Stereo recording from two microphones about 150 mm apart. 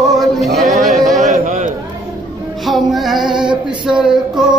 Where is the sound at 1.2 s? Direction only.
55° right (ahead or behind).